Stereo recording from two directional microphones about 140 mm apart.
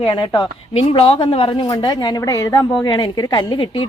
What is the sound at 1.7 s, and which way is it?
A woman's voice, 30° left (ahead or behind).